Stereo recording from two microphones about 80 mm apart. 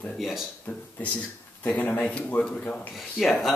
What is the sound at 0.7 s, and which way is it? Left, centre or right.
Speech, centre.